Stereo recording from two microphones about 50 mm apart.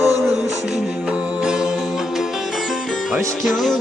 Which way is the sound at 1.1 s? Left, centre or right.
Centre.